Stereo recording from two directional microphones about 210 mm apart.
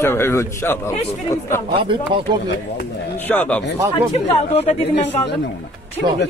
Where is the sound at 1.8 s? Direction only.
25° right (ahead or behind).